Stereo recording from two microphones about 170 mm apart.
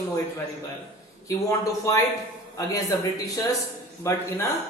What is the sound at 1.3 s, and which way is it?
Speech, 20° left (ahead or behind).